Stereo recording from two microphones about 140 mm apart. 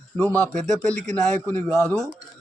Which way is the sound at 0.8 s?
5° left (ahead or behind).